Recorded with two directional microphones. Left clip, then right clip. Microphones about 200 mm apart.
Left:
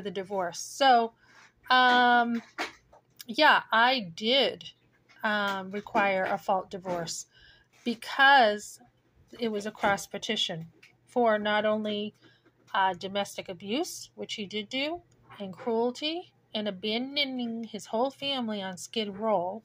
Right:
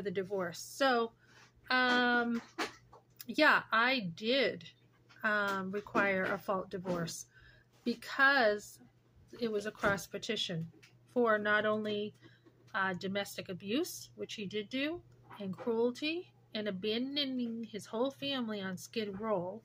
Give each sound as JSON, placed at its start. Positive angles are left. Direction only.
{"t": 0.0, "sound": "speech", "side_deg": 15}